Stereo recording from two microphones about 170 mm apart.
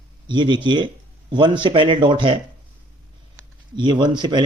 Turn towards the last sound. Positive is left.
turn(degrees=-25)  # may be behind; listen again after turning